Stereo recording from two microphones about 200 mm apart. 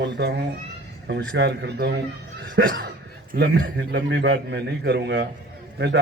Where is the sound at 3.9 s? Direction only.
60° right (ahead or behind).